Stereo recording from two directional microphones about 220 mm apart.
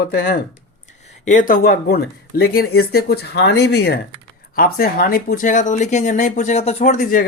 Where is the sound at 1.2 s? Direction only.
35° left (ahead or behind).